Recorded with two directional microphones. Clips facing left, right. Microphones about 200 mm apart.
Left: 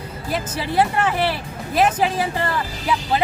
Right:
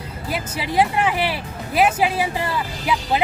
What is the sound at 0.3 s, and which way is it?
Speech, 10° right (ahead or behind).